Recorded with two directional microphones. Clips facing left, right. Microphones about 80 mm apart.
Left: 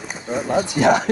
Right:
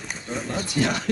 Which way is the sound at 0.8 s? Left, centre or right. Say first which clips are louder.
Left 12 dB; left.